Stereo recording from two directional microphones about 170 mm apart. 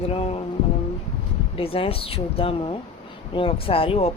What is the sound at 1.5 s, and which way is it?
A woman's voice, 35° left (ahead or behind).